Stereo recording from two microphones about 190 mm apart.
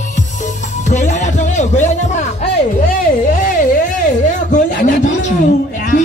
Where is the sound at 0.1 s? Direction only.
40° left (ahead or behind).